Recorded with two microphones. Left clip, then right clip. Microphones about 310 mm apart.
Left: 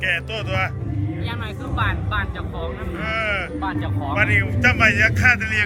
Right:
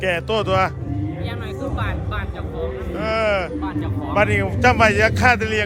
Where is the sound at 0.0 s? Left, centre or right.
Centre.